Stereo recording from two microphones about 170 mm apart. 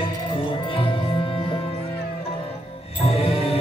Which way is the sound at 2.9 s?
35° left (ahead or behind).